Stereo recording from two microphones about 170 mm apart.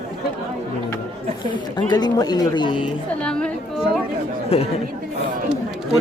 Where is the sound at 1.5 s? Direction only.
25° left (ahead or behind).